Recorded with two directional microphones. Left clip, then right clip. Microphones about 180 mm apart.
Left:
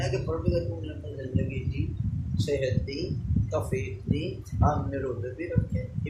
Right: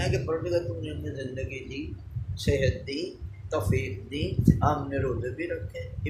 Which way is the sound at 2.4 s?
15° right (ahead or behind).